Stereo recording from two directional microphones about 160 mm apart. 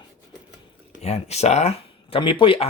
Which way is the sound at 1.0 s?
40° left (ahead or behind).